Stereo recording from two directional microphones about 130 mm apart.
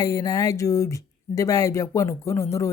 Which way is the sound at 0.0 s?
25° left (ahead or behind).